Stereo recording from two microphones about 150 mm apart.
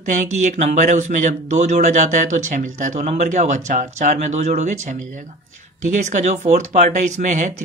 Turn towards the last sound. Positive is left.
turn(degrees=-55)  # may be behind; listen again after turning